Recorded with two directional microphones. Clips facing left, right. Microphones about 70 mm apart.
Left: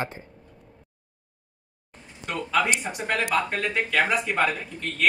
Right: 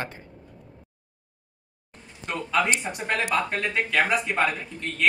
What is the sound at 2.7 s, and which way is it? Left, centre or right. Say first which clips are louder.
Speech: even; centre.